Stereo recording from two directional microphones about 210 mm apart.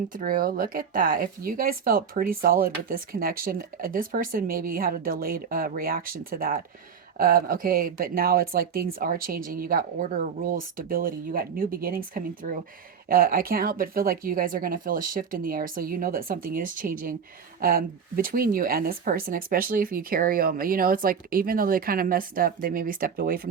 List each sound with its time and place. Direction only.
0.1 s speech: 40° right (ahead or behind)